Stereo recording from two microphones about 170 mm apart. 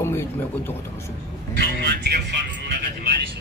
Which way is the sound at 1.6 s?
75° right (ahead or behind).